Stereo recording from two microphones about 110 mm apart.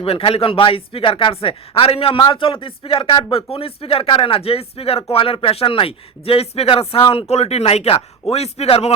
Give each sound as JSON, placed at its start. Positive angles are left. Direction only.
{"t": 0.0, "sound": "speech", "side_deg": 60}